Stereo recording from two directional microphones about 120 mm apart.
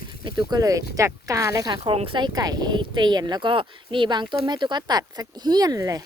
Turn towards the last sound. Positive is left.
turn(degrees=-30)  # may be behind; listen again after turning